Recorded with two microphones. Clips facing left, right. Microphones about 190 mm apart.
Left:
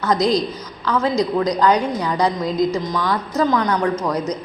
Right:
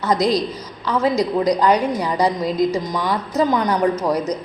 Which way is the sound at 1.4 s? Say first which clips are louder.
Right 1 dB; 10° right (ahead or behind).